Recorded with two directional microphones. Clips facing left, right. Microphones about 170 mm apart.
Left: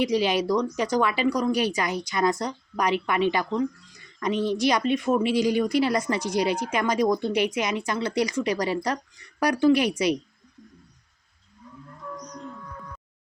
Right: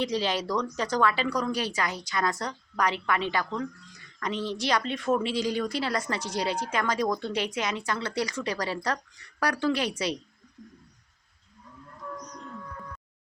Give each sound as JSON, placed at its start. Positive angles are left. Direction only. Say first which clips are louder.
{"t": 0.0, "sound": "speech", "louder": "left 5 dB", "side_deg": 15}